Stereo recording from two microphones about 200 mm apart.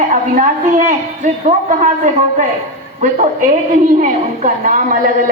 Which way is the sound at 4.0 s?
40° right (ahead or behind).